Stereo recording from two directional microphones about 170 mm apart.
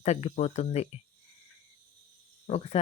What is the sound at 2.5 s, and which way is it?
Speech, 35° left (ahead or behind).